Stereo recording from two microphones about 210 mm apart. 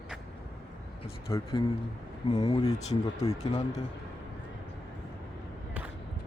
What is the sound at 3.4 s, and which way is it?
Speech, 30° left (ahead or behind).